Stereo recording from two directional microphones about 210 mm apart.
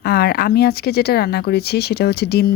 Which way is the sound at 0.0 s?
50° left (ahead or behind).